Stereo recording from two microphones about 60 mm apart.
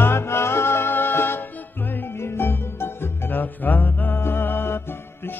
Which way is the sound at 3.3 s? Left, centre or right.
Left.